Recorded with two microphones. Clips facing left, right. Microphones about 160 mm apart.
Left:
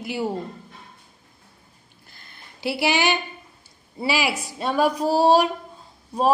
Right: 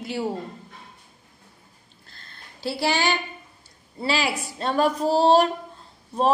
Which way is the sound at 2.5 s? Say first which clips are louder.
Left 2 dB; 15° left (ahead or behind).